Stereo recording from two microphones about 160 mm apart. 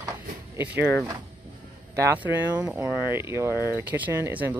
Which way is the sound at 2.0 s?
15° right (ahead or behind).